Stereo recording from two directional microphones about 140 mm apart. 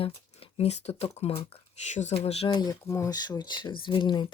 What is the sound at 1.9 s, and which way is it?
Speech, 55° left (ahead or behind).